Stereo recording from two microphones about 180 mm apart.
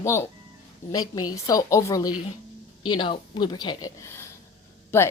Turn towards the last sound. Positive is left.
turn(degrees=10)  # may be behind; listen again after turning